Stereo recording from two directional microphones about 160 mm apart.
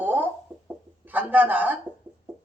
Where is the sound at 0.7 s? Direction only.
10° right (ahead or behind).